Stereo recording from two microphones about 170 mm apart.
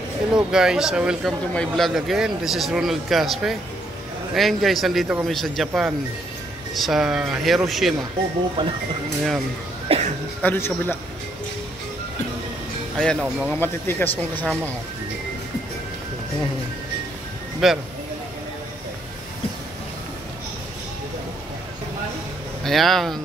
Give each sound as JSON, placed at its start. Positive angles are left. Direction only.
{"t": 0.5, "sound": "speech", "side_deg": -5}
{"t": 8.6, "sound": "speech", "side_deg": -25}
{"t": 9.8, "sound": "a sound", "side_deg": -40}
{"t": 10.4, "sound": "speech", "side_deg": 10}
{"t": 12.9, "sound": "speech", "side_deg": 0}
{"t": 13.5, "sound": "speech", "side_deg": 10}
{"t": 17.6, "sound": "speech", "side_deg": 0}
{"t": 22.6, "sound": "speech", "side_deg": 0}